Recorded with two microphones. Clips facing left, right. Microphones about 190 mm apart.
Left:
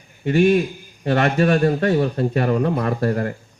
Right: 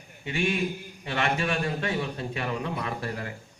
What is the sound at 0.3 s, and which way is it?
A man's voice, 40° left (ahead or behind).